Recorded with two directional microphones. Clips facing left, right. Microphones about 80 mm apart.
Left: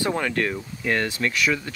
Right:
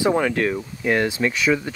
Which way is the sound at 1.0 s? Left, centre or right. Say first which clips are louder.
Right 4 dB; centre.